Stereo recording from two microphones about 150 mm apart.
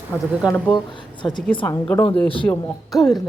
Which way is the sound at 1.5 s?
35° left (ahead or behind).